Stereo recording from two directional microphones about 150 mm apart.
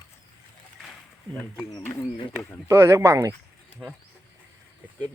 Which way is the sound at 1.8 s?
15° left (ahead or behind).